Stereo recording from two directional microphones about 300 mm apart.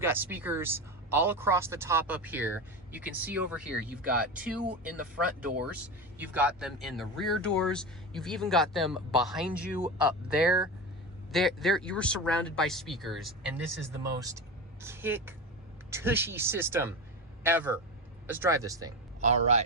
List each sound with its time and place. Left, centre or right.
0.0 s speech: centre
14.0 s speech: centre
19.2 s a man's voice: right